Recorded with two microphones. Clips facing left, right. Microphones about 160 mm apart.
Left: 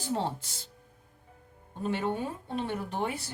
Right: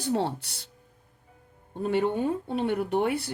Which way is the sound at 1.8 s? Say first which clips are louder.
Right 6 dB; 60° right (ahead or behind).